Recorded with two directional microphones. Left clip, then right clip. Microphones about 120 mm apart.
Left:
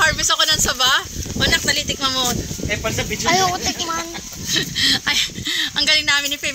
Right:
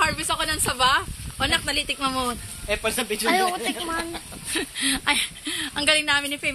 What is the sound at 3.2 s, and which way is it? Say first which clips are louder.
Speech: left 5 dB; 30° left (ahead or behind).